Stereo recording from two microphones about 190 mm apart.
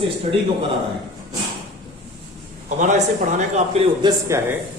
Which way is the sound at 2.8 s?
40° right (ahead or behind).